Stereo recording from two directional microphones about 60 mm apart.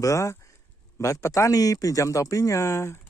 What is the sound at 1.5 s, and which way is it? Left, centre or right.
Speech, left.